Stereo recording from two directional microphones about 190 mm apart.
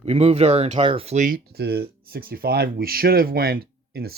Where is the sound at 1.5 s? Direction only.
60° right (ahead or behind).